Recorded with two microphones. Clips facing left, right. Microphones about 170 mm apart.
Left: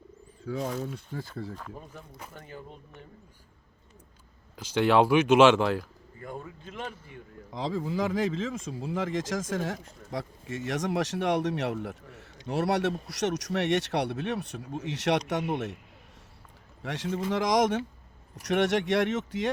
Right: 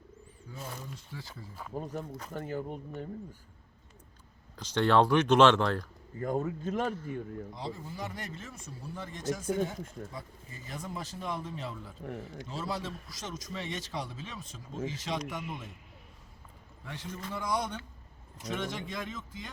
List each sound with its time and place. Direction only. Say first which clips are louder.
0.4 s speech: left 12 dB; 90° left
0.9 s speech: left 9 dB; 55° left (ahead or behind)
1.7 s speech: right 8 dB; 40° right (ahead or behind)
4.5 s speech: left 3 dB; 5° left (ahead or behind)
6.1 s speech: right 8 dB; 45° right (ahead or behind)
7.5 s speech: left 10 dB; 90° left
10.1 s speech: left 10 dB; 80° left
16.8 s speech: left 10 dB; 80° left
18.4 s speech: left 11 dB; 75° left (ahead or behind)